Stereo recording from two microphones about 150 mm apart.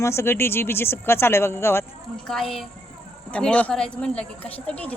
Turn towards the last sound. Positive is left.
turn(degrees=10)  # may be behind; listen again after turning